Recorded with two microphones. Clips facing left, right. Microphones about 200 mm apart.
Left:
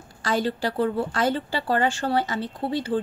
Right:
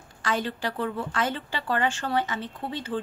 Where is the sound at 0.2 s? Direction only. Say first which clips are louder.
Left 4 dB; 35° left (ahead or behind).